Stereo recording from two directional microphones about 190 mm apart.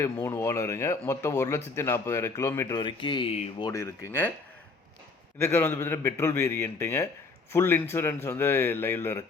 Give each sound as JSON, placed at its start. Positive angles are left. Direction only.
{"t": 0.0, "sound": "speech", "side_deg": 15}
{"t": 2.8, "sound": "speech", "side_deg": 25}
{"t": 3.7, "sound": "speech", "side_deg": 15}
{"t": 5.4, "sound": "speech", "side_deg": 10}